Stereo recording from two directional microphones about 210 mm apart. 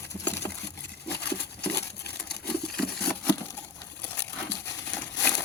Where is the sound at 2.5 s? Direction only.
5° left (ahead or behind).